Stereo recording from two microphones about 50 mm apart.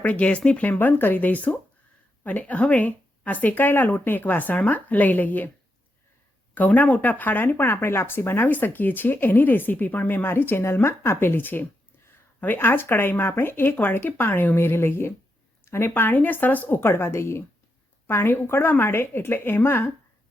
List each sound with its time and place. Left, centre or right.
0.0 s speech: left
6.5 s speech: left
8.4 s speech: left
10.2 s speech: left
16.1 s speech: left
16.8 s a woman's voice: left